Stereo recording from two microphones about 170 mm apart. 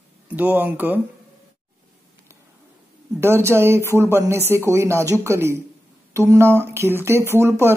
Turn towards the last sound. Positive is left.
turn(degrees=-15)  # may be behind; listen again after turning